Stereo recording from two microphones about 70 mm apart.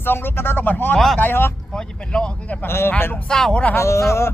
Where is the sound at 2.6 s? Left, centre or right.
Left.